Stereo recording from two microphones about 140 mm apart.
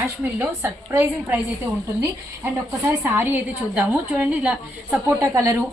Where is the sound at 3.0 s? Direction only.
15° right (ahead or behind).